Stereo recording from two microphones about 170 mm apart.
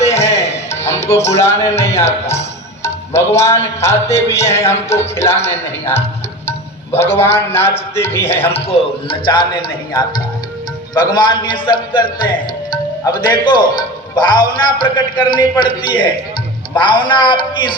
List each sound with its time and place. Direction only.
0.1 s music: 15° left (ahead or behind)
2.8 s speech: 15° left (ahead or behind)
8.5 s a man's voice: 35° left (ahead or behind)
10.9 s a man's voice: 25° left (ahead or behind)